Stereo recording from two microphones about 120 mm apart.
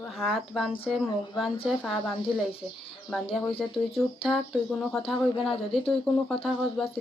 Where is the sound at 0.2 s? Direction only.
Centre (ahead or behind).